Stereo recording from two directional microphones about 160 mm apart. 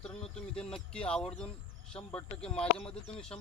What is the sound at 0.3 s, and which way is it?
Speech, 5° left (ahead or behind).